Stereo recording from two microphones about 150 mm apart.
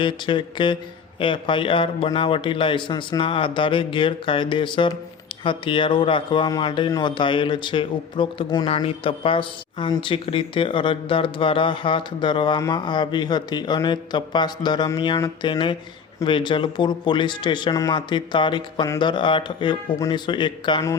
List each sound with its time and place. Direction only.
0.0 s speech: 35° left (ahead or behind)